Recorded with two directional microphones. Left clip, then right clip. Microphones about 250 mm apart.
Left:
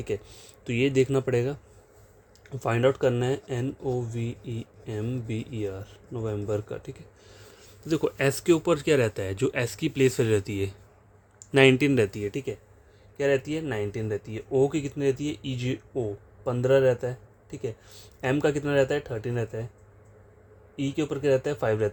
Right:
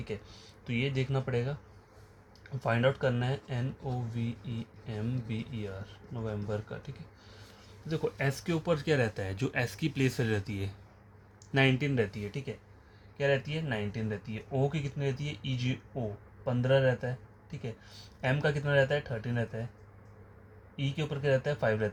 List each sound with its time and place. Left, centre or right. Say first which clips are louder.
0.0 s speech: left 9 dB; left
2.6 s speech: left 5 dB; left
20.7 s speech: left 8 dB; left